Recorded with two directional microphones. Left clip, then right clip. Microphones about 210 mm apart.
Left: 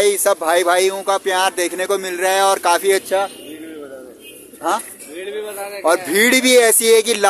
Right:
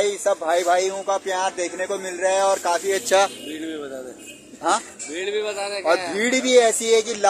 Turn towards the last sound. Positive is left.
turn(degrees=40)  # may be behind; listen again after turning